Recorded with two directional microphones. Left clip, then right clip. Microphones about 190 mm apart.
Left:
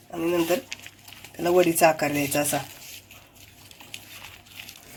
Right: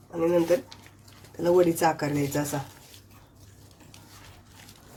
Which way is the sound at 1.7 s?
30° left (ahead or behind).